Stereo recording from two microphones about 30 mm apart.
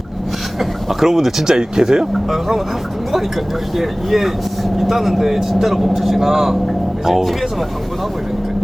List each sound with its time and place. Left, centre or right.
0.6 s speech: centre
1.5 s speech: right
3.8 s speech: centre